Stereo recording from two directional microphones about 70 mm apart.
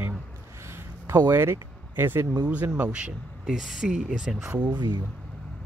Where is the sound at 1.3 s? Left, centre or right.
Right.